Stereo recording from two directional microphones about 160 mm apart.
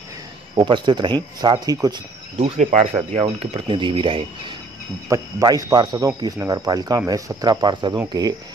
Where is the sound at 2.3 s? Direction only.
45° right (ahead or behind).